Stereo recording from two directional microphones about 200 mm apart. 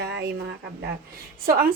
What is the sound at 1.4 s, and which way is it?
Speech, 50° right (ahead or behind).